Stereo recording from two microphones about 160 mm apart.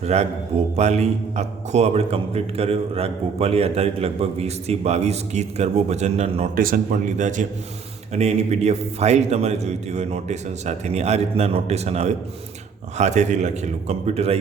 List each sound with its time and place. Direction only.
0.0 s a man's voice: 40° right (ahead or behind)
6.6 s a man's voice: 60° right (ahead or behind); by 14.3 s 40° right (ahead or behind)